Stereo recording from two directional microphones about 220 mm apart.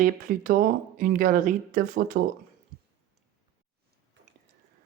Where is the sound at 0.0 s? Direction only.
40° right (ahead or behind).